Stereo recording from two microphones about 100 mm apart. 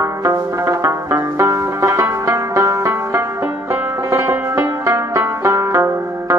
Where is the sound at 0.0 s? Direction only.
30° right (ahead or behind).